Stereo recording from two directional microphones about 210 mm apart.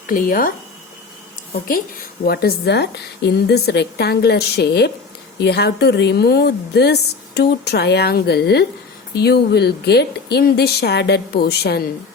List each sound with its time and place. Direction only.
0.1 s speech: 40° left (ahead or behind)
2.2 s a woman's voice: 50° left (ahead or behind)